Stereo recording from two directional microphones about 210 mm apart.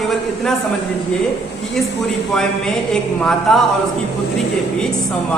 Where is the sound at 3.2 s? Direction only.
Centre (ahead or behind).